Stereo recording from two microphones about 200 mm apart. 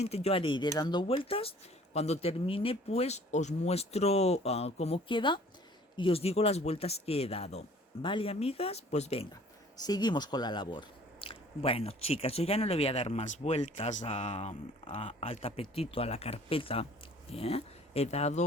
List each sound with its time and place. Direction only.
0.0 s speech: 30° left (ahead or behind)
9.8 s speech: 20° left (ahead or behind)